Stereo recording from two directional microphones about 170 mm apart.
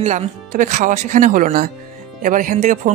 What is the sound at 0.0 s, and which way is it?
Speech, 45° right (ahead or behind).